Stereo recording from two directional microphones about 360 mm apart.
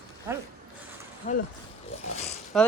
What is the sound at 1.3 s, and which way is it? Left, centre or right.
Speech, left.